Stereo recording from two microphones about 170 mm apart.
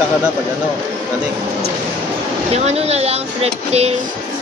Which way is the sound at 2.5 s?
40° right (ahead or behind).